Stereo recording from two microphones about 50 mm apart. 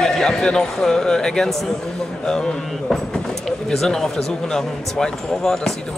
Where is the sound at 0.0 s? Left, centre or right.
Centre.